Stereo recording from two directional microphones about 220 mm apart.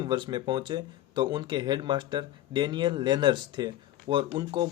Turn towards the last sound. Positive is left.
turn(degrees=-20)  # may be behind; listen again after turning